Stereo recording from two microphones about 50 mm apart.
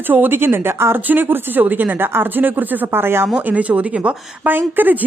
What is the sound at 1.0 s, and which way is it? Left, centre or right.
Speech, right.